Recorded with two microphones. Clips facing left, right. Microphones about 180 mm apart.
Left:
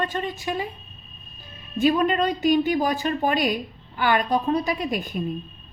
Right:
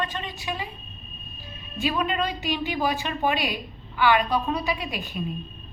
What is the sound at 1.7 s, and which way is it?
Speech, 45° left (ahead or behind).